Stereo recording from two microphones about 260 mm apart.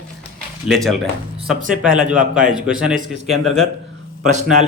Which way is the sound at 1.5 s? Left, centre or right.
Centre.